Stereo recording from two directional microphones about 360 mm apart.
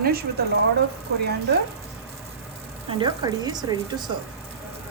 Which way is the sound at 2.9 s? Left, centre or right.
Centre.